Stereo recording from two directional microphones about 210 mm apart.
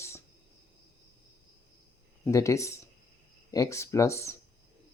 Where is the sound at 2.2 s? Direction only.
15° left (ahead or behind).